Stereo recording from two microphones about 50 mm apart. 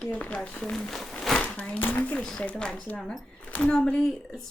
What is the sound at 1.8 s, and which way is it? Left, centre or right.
Speech, left.